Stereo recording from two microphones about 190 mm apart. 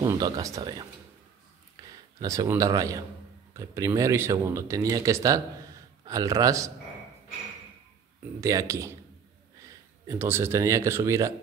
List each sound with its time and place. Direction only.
0.0 s speech: 20° right (ahead or behind)
1.8 s a sound: 20° right (ahead or behind)
2.1 s speech: 15° right (ahead or behind)
8.4 s speech: 15° right (ahead or behind)
10.0 s speech: 15° right (ahead or behind)